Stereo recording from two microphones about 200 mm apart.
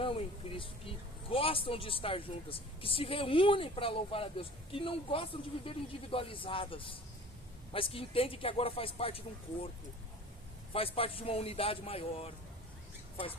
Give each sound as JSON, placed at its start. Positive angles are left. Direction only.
{"t": 0.0, "sound": "a woman's voice", "side_deg": 25}
{"t": 10.7, "sound": "a woman's voice", "side_deg": 30}